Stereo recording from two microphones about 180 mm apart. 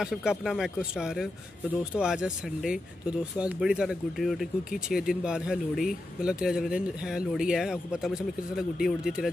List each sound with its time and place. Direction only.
0.0 s speech: 5° right (ahead or behind)